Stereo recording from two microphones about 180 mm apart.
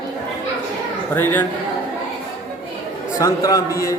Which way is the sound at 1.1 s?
10° left (ahead or behind).